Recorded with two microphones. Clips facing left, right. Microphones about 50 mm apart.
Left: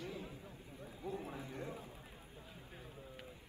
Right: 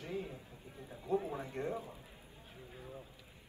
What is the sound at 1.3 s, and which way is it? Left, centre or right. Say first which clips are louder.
Speech: right 7 dB; right.